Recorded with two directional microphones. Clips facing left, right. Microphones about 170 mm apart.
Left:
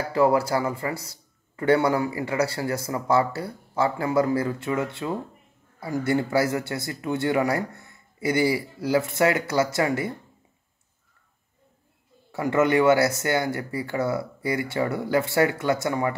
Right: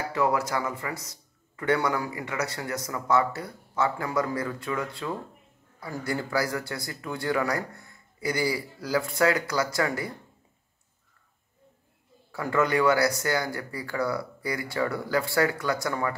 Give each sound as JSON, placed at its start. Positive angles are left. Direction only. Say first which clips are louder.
{"t": 0.1, "sound": "speech", "louder": "left 6 dB", "side_deg": 30}
{"t": 12.3, "sound": "speech", "louder": "left 4 dB", "side_deg": 25}